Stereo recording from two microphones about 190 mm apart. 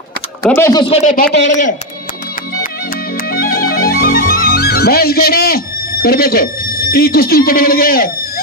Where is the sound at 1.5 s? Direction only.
40° left (ahead or behind).